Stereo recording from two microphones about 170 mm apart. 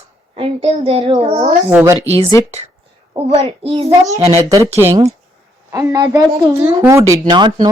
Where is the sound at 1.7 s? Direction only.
15° right (ahead or behind).